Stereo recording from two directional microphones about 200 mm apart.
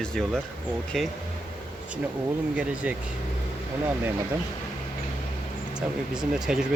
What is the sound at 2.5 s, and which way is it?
Speech, 5° right (ahead or behind).